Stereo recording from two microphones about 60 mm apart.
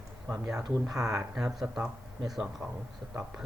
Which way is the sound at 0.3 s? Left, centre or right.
Right.